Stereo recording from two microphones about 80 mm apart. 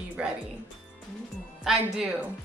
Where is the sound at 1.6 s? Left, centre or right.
Centre.